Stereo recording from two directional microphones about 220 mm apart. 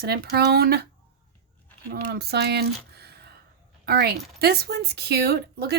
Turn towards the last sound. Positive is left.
turn(degrees=-45)  # may be behind; listen again after turning